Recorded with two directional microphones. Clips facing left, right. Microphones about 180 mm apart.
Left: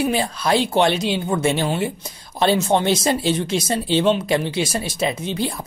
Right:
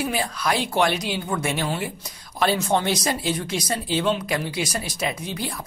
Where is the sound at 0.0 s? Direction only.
25° left (ahead or behind).